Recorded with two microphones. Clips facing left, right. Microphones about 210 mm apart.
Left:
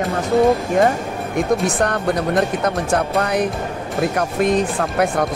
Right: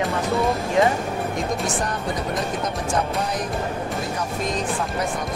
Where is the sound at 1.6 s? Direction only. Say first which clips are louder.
Left 6 dB; 70° left (ahead or behind).